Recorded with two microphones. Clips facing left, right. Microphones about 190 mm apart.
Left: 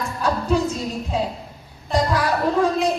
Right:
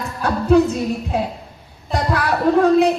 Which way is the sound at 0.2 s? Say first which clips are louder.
Right 1 dB; 60° right (ahead or behind).